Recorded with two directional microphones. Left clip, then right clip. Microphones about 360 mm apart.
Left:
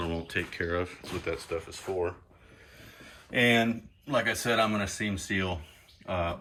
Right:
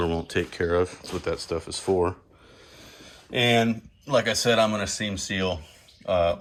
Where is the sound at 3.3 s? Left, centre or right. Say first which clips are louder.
Right 3 dB; centre.